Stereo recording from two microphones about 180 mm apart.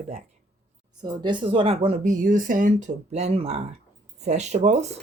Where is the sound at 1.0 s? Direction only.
25° right (ahead or behind); by 4.9 s 40° right (ahead or behind).